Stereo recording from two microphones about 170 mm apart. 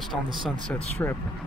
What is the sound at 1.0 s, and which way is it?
Speech, 15° left (ahead or behind).